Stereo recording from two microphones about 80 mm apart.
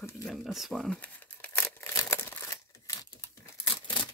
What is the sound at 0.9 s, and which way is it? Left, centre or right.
Crumpling, centre.